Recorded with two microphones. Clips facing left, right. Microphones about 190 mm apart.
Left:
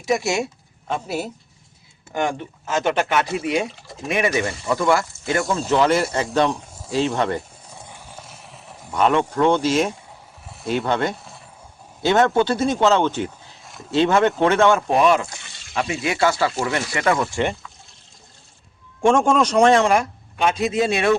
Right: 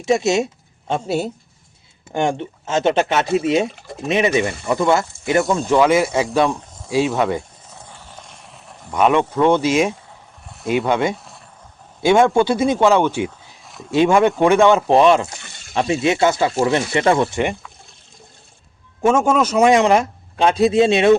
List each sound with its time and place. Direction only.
0.0 s speech: 25° right (ahead or behind)
5.5 s speech: 10° right (ahead or behind)
7.8 s a sound: 10° left (ahead or behind)
8.9 s speech: 10° right (ahead or behind)
10.4 s a sound: centre (ahead or behind)
10.7 s speech: 10° right (ahead or behind); by 17.4 s 25° right (ahead or behind)
19.0 s speech: 5° right (ahead or behind)
20.3 s speech: 35° right (ahead or behind)